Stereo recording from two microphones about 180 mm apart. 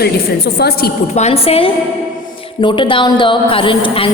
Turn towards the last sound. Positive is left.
turn(degrees=30)  # may be behind; listen again after turning